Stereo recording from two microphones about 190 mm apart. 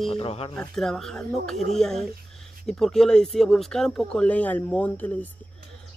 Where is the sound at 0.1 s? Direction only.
30° left (ahead or behind).